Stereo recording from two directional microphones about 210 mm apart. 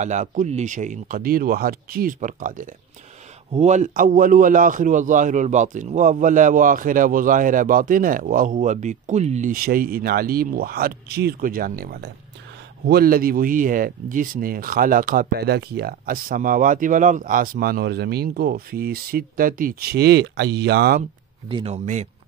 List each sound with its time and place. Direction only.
0.0 s a man's voice: 35° right (ahead or behind)
21.5 s speech: 25° right (ahead or behind)